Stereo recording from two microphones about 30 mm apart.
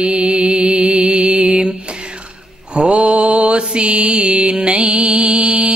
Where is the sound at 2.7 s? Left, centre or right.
Right.